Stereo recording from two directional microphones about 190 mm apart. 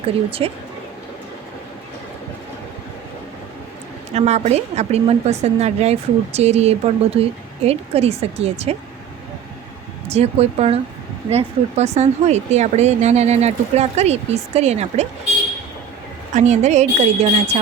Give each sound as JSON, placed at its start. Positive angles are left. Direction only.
{"t": 0.3, "sound": "speech", "side_deg": -30}
{"t": 4.1, "sound": "a woman's voice", "side_deg": -35}
{"t": 10.1, "sound": "a woman's voice", "side_deg": -35}
{"t": 16.3, "sound": "a woman's voice", "side_deg": -40}